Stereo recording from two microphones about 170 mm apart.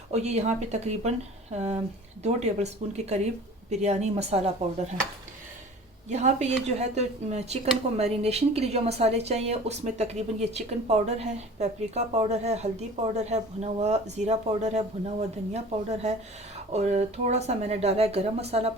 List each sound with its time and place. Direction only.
0.1 s speech: 40° right (ahead or behind)
6.1 s a woman's voice: 45° right (ahead or behind)